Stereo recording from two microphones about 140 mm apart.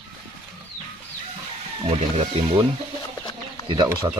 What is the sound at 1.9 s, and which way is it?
Speech, 45° right (ahead or behind).